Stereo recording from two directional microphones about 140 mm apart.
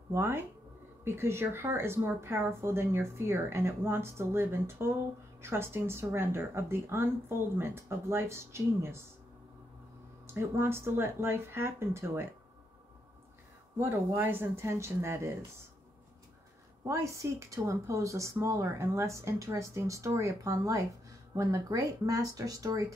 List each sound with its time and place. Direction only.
0.1 s a woman's voice: 20° right (ahead or behind)
10.2 s a woman's voice: 20° right (ahead or behind)
13.7 s a woman's voice: 15° right (ahead or behind)
16.8 s a woman's voice: 20° right (ahead or behind)